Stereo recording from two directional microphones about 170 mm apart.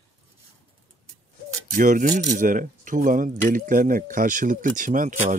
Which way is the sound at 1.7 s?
50° right (ahead or behind).